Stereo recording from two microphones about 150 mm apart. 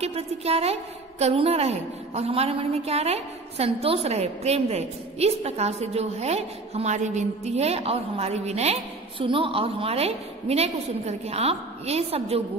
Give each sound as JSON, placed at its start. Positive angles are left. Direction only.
{"t": 0.0, "sound": "a woman's voice", "side_deg": -45}